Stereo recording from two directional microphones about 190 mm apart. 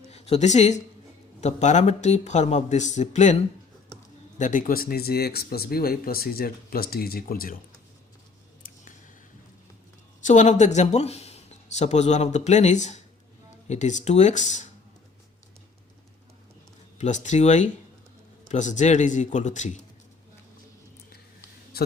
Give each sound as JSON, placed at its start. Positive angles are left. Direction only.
{"t": 0.1, "sound": "speech", "side_deg": 35}
{"t": 10.2, "sound": "speech", "side_deg": 40}
{"t": 17.0, "sound": "speech", "side_deg": 40}
{"t": 21.7, "sound": "a sound", "side_deg": 55}